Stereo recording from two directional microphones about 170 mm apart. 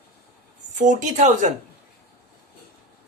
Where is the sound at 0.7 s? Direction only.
45° right (ahead or behind).